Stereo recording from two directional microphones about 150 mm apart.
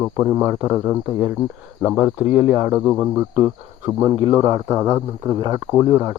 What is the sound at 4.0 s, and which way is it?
Speech, 25° right (ahead or behind).